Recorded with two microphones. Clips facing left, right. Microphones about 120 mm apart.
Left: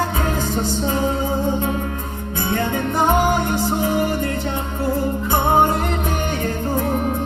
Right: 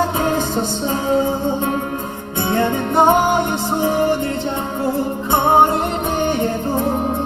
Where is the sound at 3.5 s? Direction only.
25° right (ahead or behind).